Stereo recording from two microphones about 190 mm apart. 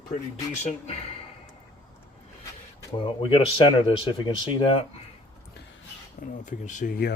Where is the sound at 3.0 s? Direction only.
25° left (ahead or behind).